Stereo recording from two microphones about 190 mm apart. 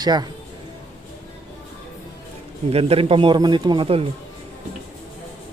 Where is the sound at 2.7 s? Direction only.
30° right (ahead or behind).